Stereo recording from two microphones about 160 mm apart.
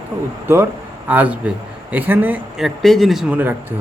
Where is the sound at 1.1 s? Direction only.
10° right (ahead or behind).